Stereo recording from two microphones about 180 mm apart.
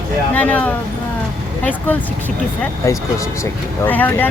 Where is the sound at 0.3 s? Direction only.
10° left (ahead or behind).